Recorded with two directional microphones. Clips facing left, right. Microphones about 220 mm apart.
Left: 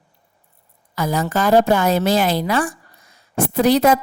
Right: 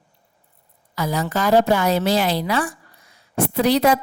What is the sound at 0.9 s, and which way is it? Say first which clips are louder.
A woman's voice: left 2 dB; 50° left (ahead or behind).